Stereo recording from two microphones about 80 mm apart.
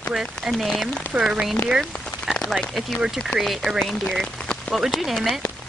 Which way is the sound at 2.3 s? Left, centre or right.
Centre.